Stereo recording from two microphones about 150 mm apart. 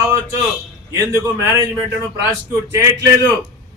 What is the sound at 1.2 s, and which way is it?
Speech, 20° right (ahead or behind).